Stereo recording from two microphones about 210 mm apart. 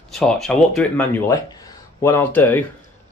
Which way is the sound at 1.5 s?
15° left (ahead or behind).